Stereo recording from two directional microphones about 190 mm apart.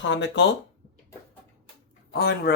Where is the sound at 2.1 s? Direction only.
55° left (ahead or behind).